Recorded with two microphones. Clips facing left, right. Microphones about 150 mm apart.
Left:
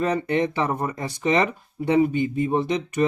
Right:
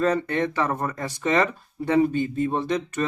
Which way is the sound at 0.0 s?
15° left (ahead or behind).